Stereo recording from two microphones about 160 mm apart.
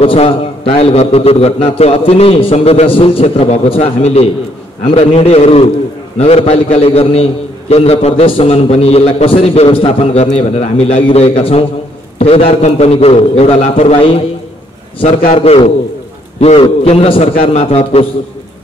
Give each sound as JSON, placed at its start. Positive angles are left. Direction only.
{"t": 0.0, "sound": "a man's voice", "side_deg": 35}
{"t": 15.3, "sound": "a man's voice", "side_deg": 35}